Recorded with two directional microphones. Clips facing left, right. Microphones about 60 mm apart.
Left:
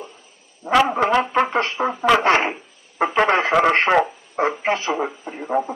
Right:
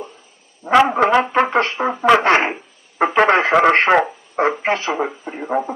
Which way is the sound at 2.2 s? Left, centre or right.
Right.